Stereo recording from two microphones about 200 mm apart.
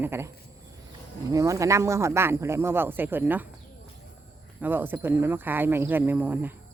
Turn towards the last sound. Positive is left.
turn(degrees=-10)  # may be behind; listen again after turning